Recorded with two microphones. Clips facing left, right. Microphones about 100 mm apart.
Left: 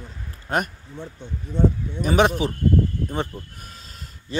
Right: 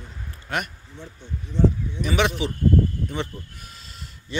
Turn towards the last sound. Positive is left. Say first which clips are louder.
# left 2 dB
turn(degrees=40)  # may be behind; listen again after turning